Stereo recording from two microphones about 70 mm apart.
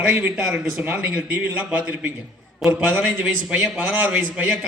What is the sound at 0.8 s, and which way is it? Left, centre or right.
A man's voice, right.